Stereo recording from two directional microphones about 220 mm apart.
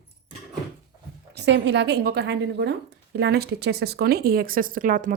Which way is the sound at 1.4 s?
55° right (ahead or behind).